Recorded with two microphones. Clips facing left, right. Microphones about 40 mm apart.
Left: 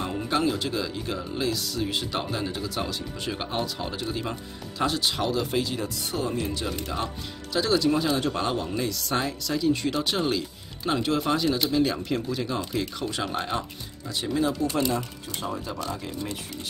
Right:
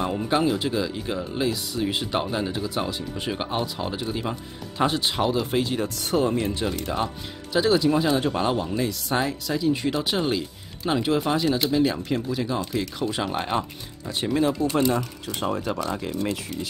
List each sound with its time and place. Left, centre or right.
0.0 s speech: centre
4.7 s speech: right
6.6 s speech: centre
13.1 s speech: centre
14.3 s speech: right
14.9 s speech: right